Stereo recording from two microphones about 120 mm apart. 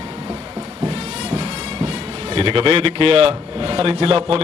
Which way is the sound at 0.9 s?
55° right (ahead or behind).